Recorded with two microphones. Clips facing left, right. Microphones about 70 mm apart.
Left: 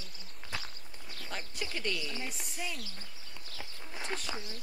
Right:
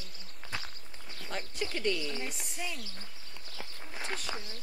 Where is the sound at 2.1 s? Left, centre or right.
Centre.